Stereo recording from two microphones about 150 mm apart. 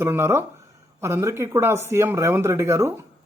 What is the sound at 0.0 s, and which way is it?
Speech, 15° right (ahead or behind).